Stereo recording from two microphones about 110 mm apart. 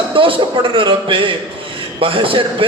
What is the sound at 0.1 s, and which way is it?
A man's voice, 55° right (ahead or behind).